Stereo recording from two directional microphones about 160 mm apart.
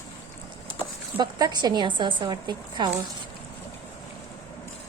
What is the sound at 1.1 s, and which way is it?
A woman's voice, 25° right (ahead or behind).